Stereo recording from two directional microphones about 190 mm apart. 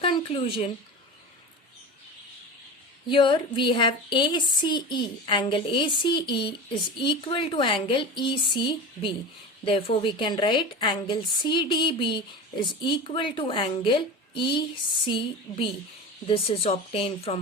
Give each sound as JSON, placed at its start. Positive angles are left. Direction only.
{"t": 0.0, "sound": "speech", "side_deg": 25}
{"t": 3.1, "sound": "a woman's voice", "side_deg": 25}